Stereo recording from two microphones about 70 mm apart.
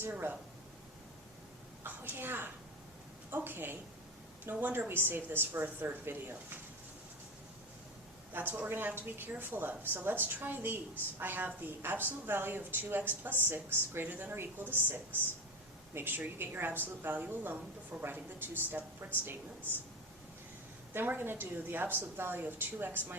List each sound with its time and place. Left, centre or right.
0.0 s a woman's voice: right
1.8 s a woman's voice: right
8.3 s a woman's voice: right
20.9 s a woman's voice: right